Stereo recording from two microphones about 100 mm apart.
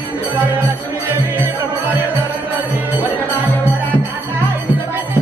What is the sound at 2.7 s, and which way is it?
Music, 15° right (ahead or behind).